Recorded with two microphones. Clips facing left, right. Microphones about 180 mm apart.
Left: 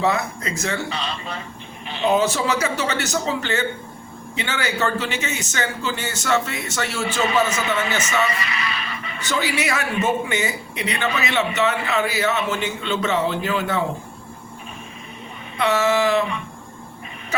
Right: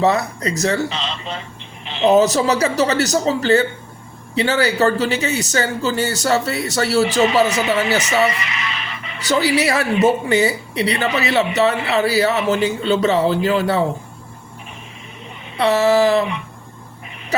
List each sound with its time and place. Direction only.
0.0 s speech: 35° right (ahead or behind)
0.9 s speech: 20° right (ahead or behind)
2.0 s speech: 40° right (ahead or behind)
8.4 s speech: 20° right (ahead or behind)
9.2 s speech: 35° right (ahead or behind)
15.5 s speech: 35° right (ahead or behind)